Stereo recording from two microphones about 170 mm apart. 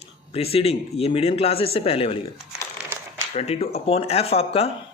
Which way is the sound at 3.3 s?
35° left (ahead or behind).